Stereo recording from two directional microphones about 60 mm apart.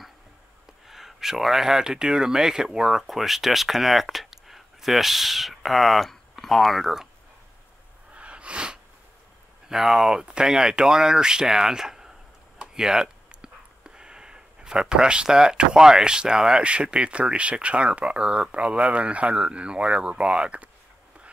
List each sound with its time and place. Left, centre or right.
0.8 s speech: centre
8.1 s sneeze: centre
9.7 s speech: centre